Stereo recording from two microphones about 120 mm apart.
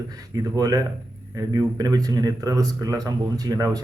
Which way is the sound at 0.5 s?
30° right (ahead or behind).